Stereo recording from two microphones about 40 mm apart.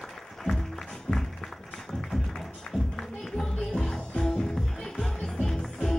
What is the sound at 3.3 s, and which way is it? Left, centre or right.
Music, centre.